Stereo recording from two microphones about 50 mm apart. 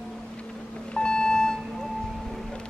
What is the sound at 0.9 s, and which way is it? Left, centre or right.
Vehicle, centre.